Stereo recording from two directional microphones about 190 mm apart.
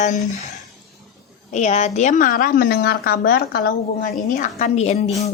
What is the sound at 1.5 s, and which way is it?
A woman's voice, 35° left (ahead or behind).